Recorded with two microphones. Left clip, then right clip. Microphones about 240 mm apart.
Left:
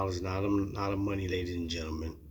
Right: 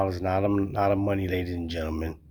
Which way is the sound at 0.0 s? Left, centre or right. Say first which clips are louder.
Right 8 dB; right.